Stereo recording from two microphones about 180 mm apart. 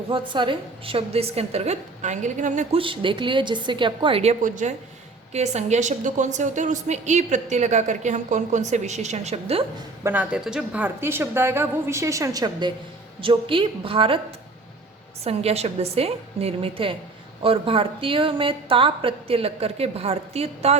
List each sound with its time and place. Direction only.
0.1 s a woman's voice: 30° right (ahead or behind); by 2.6 s 45° right (ahead or behind)
2.7 s a woman's voice: 30° right (ahead or behind)
10.0 s a woman's voice: 10° right (ahead or behind); by 14.2 s 30° right (ahead or behind)
15.2 s a woman's voice: 35° right (ahead or behind)